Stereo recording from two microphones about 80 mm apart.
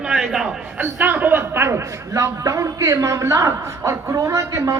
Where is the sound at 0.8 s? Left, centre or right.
Right.